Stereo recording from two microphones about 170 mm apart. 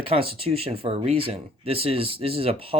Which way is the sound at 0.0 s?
35° right (ahead or behind).